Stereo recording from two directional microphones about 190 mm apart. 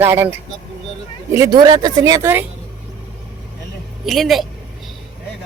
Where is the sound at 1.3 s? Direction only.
20° right (ahead or behind).